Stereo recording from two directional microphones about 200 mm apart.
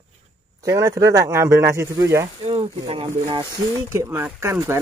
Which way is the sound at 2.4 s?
30° right (ahead or behind).